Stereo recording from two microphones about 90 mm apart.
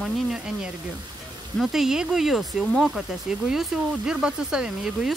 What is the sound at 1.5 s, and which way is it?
Speech, 5° right (ahead or behind).